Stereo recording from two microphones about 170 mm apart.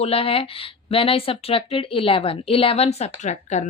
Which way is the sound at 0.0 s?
35° left (ahead or behind).